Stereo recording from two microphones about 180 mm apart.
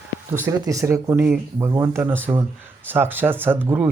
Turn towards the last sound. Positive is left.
turn(degrees=-10)  # may be behind; listen again after turning